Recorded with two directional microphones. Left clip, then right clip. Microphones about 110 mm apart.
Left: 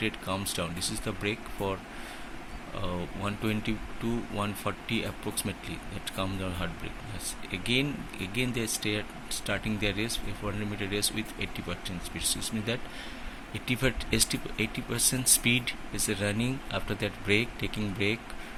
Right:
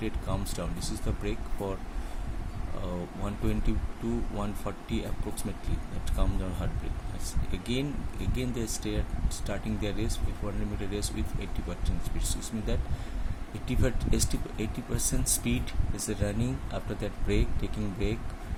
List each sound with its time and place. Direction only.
0.0 s speech: 15° right (ahead or behind)
2.8 s speech: 15° right (ahead or behind)